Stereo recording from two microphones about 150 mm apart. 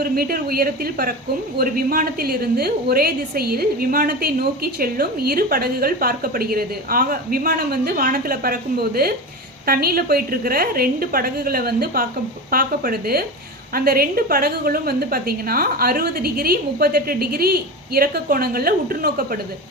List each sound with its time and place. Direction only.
0.0 s a woman's voice: 80° right